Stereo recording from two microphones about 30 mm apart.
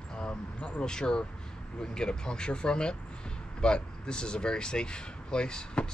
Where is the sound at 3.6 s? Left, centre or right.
Left.